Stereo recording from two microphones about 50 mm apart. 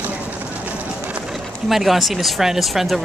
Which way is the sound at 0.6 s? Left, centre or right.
Right.